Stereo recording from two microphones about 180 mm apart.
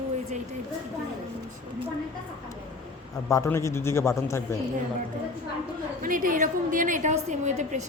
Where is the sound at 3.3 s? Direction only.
15° left (ahead or behind).